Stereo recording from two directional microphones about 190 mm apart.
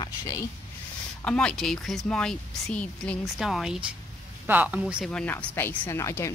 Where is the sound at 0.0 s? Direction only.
20° left (ahead or behind).